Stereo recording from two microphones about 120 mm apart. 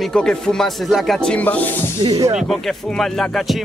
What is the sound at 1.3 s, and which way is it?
Speech, 15° left (ahead or behind).